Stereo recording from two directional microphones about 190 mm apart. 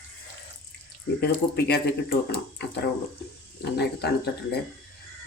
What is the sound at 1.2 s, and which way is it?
Speech, 60° left (ahead or behind).